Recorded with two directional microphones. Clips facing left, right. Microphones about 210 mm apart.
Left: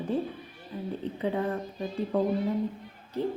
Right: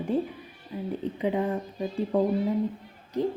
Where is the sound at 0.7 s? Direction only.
10° right (ahead or behind).